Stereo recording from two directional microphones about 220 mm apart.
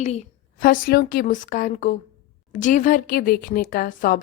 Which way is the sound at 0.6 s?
40° left (ahead or behind).